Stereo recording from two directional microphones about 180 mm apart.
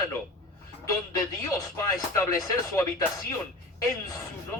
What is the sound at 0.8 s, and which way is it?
Speech, 15° left (ahead or behind).